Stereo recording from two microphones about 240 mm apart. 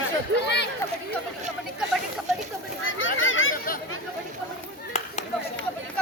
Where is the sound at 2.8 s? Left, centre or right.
Left.